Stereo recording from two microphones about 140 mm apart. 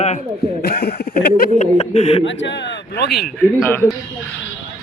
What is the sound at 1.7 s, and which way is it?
Speech, 50° left (ahead or behind).